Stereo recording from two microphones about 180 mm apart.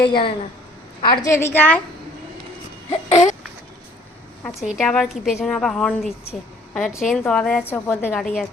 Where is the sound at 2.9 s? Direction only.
40° left (ahead or behind).